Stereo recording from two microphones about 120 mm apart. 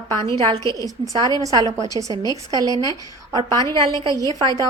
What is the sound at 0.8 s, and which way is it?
A woman's voice, 30° right (ahead or behind).